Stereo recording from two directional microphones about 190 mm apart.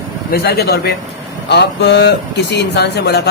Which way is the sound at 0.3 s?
55° left (ahead or behind).